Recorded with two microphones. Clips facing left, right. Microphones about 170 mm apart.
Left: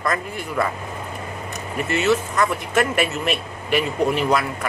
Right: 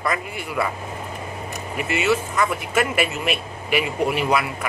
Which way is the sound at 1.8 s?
5° right (ahead or behind).